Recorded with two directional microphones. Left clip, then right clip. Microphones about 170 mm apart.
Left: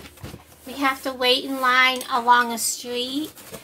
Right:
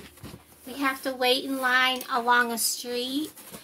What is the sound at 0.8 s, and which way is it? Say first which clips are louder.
A woman's voice: left 4 dB; 30° right (ahead or behind).